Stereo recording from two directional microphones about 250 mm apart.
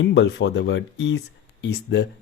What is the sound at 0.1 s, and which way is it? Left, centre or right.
Speech, left.